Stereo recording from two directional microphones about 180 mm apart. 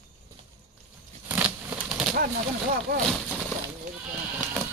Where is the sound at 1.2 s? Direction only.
10° right (ahead or behind).